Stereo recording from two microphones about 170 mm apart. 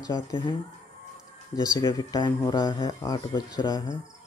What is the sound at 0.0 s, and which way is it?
Speech, 25° left (ahead or behind).